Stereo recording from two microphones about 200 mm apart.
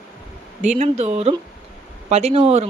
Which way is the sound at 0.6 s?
35° right (ahead or behind).